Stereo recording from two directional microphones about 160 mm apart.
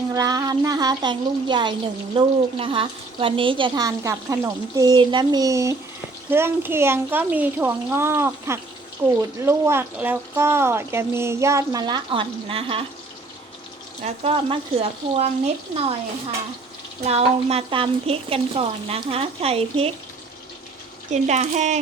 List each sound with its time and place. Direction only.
0.1 s speech: 20° right (ahead or behind)
14.0 s speech: 35° right (ahead or behind)
17.0 s speech: 40° right (ahead or behind)
21.1 s speech: 45° right (ahead or behind)